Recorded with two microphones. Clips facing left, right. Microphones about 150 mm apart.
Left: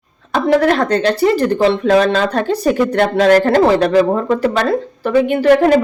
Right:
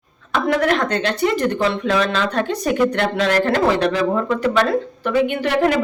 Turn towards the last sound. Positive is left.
turn(degrees=40)  # may be behind; listen again after turning